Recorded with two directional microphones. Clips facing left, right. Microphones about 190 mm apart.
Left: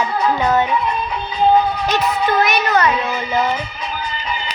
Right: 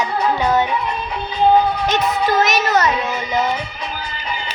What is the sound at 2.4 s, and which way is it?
Speech, 40° right (ahead or behind).